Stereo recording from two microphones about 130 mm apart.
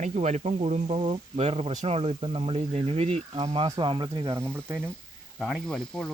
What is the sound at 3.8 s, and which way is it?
Speech, 40° right (ahead or behind).